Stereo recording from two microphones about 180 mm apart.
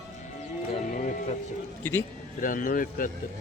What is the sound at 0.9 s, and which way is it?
Music, 45° left (ahead or behind).